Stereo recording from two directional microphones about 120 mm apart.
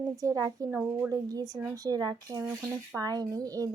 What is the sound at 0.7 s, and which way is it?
Speech, 15° right (ahead or behind).